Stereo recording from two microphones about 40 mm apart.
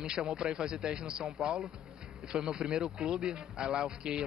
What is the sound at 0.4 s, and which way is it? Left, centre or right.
A man's voice, right.